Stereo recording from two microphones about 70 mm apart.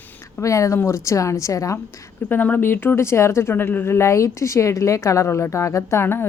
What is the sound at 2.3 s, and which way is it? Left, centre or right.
Speech, left.